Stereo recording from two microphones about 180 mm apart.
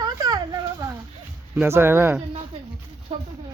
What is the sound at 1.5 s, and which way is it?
Speech, 10° right (ahead or behind).